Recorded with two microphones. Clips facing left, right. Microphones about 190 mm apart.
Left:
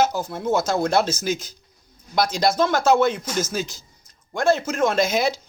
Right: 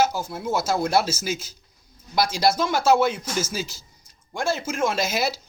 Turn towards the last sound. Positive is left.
turn(degrees=-5)  # may be behind; listen again after turning